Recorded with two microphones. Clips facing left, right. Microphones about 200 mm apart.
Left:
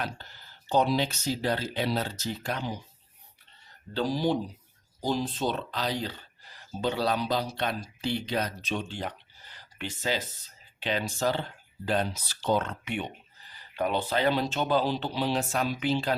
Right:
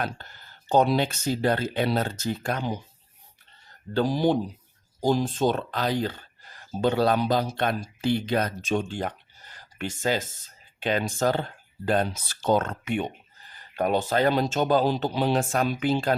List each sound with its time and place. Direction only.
0.0 s speech: 50° right (ahead or behind)
3.9 s speech: 55° right (ahead or behind)